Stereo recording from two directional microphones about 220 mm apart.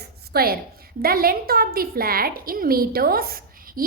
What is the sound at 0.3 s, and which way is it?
A woman's voice, 45° right (ahead or behind).